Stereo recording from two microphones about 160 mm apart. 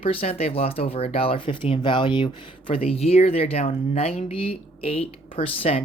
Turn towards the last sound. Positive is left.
turn(degrees=35)  # may be behind; listen again after turning